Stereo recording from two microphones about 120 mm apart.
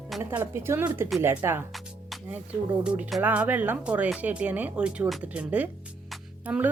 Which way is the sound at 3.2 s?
15° right (ahead or behind).